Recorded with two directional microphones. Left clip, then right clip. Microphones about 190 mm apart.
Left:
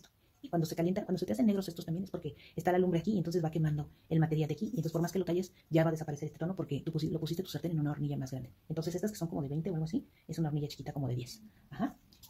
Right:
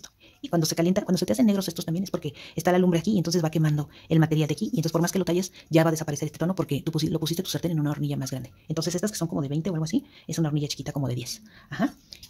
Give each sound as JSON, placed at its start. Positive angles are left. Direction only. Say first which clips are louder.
{"t": 0.4, "sound": "speech", "louder": "right 9 dB", "side_deg": -35}